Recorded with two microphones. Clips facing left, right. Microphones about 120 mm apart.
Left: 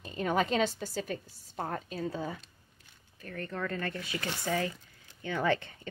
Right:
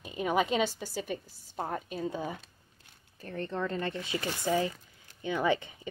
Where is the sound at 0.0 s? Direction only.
10° right (ahead or behind).